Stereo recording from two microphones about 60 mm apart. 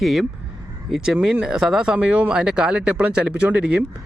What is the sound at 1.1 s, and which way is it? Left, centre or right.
Speech, right.